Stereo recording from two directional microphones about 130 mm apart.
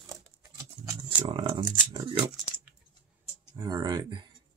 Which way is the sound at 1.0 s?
45° right (ahead or behind).